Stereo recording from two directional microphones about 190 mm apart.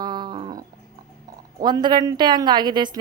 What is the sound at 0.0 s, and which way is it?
Dog, 20° right (ahead or behind).